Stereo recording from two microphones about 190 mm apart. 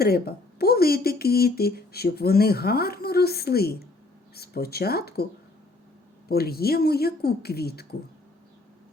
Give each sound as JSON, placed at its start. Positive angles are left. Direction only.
{"t": 0.0, "sound": "speech", "side_deg": 55}
{"t": 6.2, "sound": "speech", "side_deg": 55}